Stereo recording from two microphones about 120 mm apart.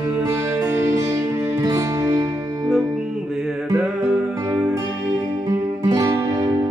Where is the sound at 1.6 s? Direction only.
30° right (ahead or behind).